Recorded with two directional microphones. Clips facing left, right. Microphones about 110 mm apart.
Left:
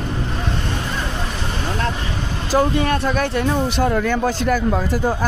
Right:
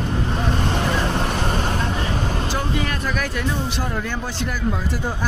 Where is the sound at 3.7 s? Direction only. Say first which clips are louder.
Left 8 dB; 80° left.